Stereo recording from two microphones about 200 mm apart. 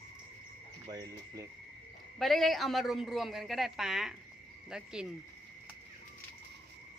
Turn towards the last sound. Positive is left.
turn(degrees=-5)  # may be behind; listen again after turning